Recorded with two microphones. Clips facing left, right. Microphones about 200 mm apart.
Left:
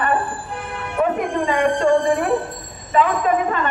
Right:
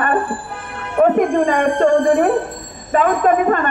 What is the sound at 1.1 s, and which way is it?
Speech, 50° right (ahead or behind).